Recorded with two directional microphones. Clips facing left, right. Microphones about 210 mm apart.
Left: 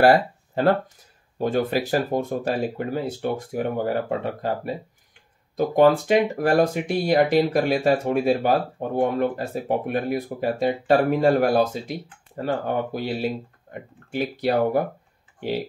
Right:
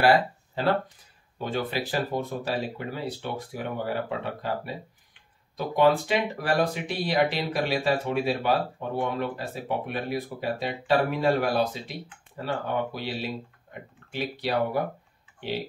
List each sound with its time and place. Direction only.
0.0 s speech: 45° left (ahead or behind)
5.6 s speech: 45° left (ahead or behind)
13.7 s a sound: 40° left (ahead or behind)
14.1 s speech: 45° left (ahead or behind)